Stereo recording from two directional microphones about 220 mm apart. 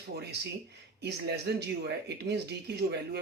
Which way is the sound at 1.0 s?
50° right (ahead or behind).